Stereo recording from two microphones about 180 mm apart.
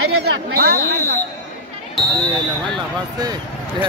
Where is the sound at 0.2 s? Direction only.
60° right (ahead or behind).